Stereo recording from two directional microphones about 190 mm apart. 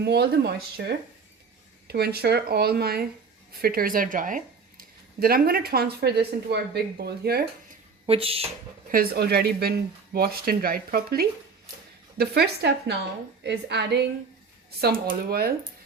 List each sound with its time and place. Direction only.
0.0 s speech: 60° right (ahead or behind)
8.0 s speech: 30° right (ahead or behind)
8.9 s speech: 55° right (ahead or behind)